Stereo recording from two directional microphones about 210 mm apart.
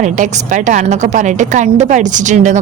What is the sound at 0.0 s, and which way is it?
A woman's voice, 35° right (ahead or behind).